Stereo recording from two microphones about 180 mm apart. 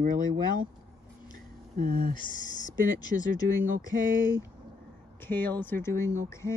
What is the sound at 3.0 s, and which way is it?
Speech, 20° left (ahead or behind).